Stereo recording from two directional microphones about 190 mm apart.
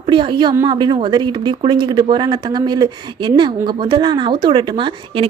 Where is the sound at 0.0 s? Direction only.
25° right (ahead or behind).